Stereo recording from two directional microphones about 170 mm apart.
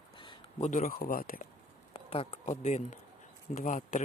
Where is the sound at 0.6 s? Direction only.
50° left (ahead or behind).